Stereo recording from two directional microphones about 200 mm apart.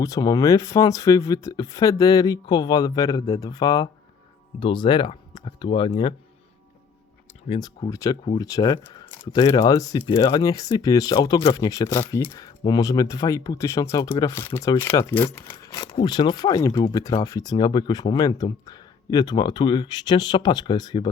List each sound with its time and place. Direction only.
0.0 s speech: 20° left (ahead or behind)
7.4 s speech: 30° left (ahead or behind)